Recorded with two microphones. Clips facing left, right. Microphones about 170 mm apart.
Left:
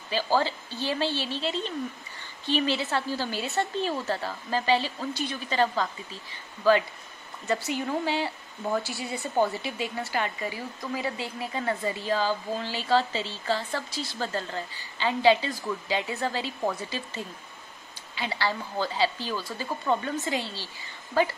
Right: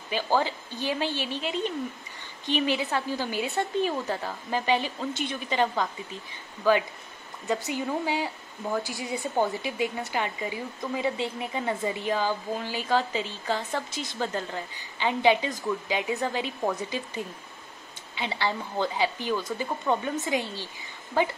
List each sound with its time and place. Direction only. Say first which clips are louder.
0.4 s speech: even; 15° right (ahead or behind)
7.6 s speech: even; 15° right (ahead or behind)